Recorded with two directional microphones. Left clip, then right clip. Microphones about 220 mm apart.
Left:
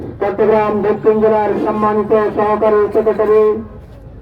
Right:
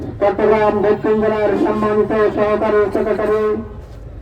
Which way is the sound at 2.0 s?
40° left (ahead or behind).